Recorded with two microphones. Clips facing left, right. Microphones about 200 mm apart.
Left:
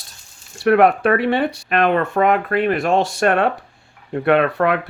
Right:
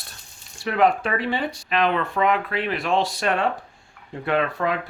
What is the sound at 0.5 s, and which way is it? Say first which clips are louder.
Speech: left 7 dB; 65° left (ahead or behind).